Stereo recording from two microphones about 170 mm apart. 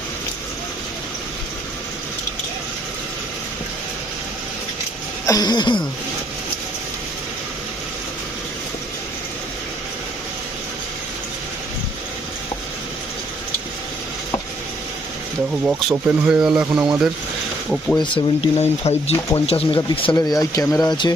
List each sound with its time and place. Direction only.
5.2 s speech: 20° left (ahead or behind)
15.6 s speech: 5° right (ahead or behind)
18.0 s speech: 35° left (ahead or behind)